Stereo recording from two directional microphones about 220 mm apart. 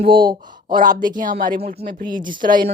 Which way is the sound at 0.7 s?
40° right (ahead or behind).